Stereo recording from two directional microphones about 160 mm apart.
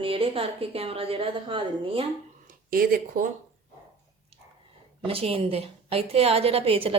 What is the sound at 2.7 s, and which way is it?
Speech, 65° right (ahead or behind).